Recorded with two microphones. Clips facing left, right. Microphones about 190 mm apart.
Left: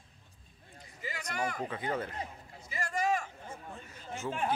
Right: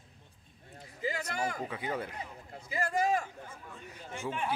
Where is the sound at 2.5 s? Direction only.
55° right (ahead or behind).